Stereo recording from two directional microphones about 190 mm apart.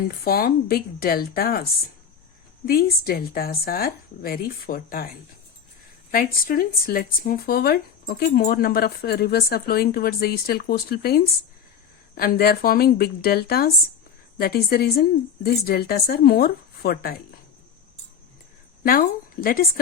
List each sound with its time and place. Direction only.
0.3 s a woman's voice: 55° left (ahead or behind)
2.6 s a woman's voice: 55° left (ahead or behind)
6.1 s a woman's voice: 50° left (ahead or behind)
18.8 s a woman's voice: 50° left (ahead or behind)